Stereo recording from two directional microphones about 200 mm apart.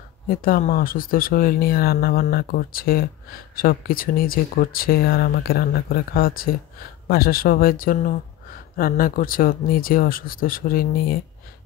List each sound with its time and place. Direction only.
0.3 s speech: 45° left (ahead or behind)